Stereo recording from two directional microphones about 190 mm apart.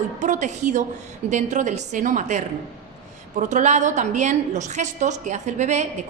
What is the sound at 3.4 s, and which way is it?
A woman's voice, 40° right (ahead or behind).